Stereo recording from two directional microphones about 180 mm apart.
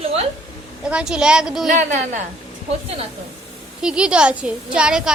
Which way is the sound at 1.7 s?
45° right (ahead or behind).